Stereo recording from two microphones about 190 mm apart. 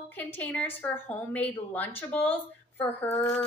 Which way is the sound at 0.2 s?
10° left (ahead or behind).